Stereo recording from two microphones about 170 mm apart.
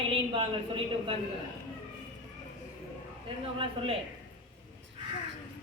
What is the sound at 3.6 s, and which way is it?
Speech, 30° right (ahead or behind).